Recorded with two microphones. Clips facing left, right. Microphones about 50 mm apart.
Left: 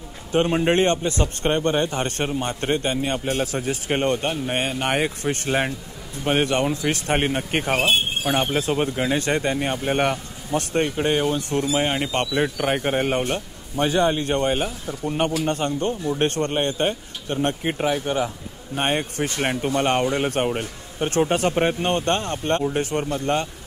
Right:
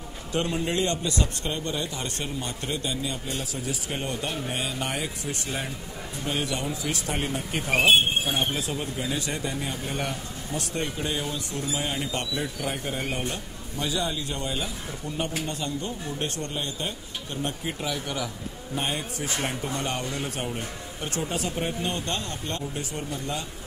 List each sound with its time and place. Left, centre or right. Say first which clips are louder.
0.3 s a man's voice: left 8 dB; left
18.8 s a man's voice: left 8 dB; left